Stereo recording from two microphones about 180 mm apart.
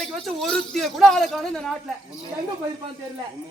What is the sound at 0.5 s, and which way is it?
A man's voice, centre (ahead or behind).